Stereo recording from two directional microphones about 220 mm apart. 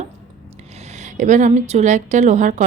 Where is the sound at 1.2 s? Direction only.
35° right (ahead or behind).